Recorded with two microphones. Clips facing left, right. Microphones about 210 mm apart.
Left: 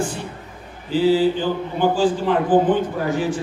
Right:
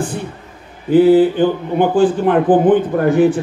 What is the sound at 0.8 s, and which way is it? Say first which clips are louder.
A man's voice: right 7 dB; 55° right (ahead or behind).